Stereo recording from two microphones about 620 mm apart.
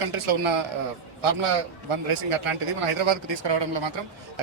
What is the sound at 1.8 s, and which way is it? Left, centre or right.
A man's voice, right.